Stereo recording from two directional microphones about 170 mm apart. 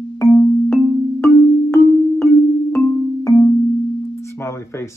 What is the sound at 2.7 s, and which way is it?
Music, 15° left (ahead or behind).